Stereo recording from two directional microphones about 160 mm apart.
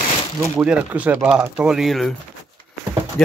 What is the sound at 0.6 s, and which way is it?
Speech, 5° right (ahead or behind).